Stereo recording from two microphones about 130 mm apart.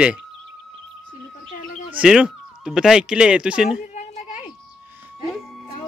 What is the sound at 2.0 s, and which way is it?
Speech, 5° right (ahead or behind).